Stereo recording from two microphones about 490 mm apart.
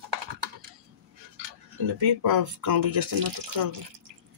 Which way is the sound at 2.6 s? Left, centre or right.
Right.